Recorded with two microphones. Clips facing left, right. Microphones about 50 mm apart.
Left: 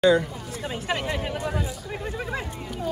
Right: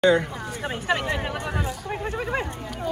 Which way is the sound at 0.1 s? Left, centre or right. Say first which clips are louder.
Even; right.